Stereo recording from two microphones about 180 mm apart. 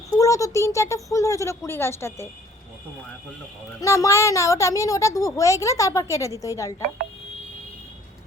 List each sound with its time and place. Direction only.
0.2 s a woman's voice: 20° left (ahead or behind)
3.8 s a woman's voice: 15° left (ahead or behind)